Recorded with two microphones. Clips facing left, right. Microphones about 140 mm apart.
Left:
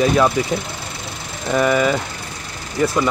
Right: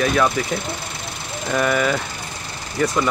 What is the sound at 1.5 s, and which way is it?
Speech, 10° left (ahead or behind).